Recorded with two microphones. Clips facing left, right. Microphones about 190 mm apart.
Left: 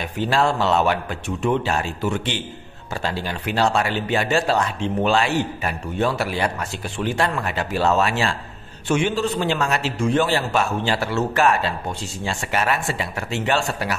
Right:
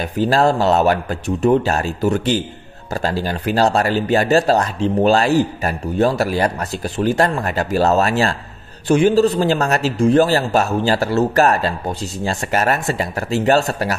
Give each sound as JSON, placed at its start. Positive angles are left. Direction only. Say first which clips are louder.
{"t": 0.2, "sound": "speech", "louder": "right 5 dB", "side_deg": -40}